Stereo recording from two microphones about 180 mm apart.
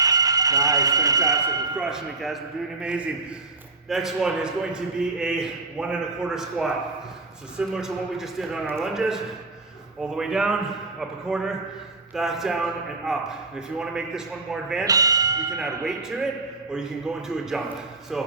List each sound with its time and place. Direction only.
0.0 s speech: 20° right (ahead or behind)
1.7 s a man's voice: 5° right (ahead or behind)
14.8 s speech: 20° right (ahead or behind)
16.7 s a man's voice: 5° right (ahead or behind)